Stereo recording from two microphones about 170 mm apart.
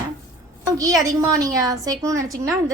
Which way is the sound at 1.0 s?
20° right (ahead or behind).